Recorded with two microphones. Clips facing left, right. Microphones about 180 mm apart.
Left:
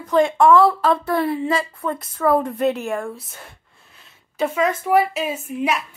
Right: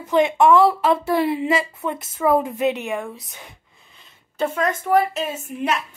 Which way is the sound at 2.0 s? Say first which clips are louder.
Even; centre (ahead or behind).